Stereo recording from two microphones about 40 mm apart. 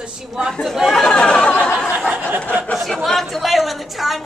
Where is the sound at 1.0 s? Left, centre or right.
Left.